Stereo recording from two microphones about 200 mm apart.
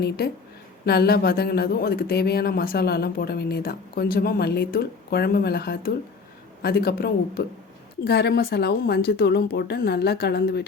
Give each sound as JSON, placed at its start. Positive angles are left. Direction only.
{"t": 0.9, "sound": "a woman's voice", "side_deg": 50}